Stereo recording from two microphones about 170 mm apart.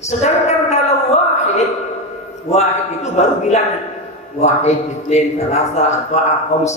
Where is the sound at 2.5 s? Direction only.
40° left (ahead or behind).